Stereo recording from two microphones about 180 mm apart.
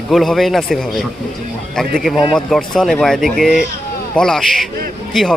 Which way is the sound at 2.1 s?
25° left (ahead or behind).